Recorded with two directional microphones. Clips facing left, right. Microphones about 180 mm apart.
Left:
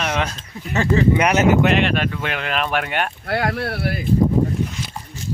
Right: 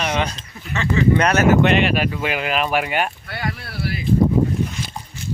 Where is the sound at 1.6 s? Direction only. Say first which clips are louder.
Right 1 dB; centre (ahead or behind).